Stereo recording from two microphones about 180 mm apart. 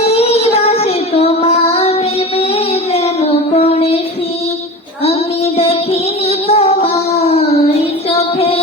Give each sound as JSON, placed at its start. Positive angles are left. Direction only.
{"t": 0.0, "sound": "child singing", "side_deg": 35}
{"t": 2.4, "sound": "music", "side_deg": 35}
{"t": 5.5, "sound": "music", "side_deg": 35}